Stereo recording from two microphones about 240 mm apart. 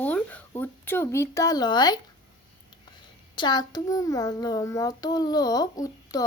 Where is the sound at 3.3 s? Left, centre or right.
Centre.